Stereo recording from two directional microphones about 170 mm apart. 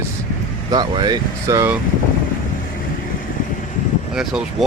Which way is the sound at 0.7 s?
25° right (ahead or behind).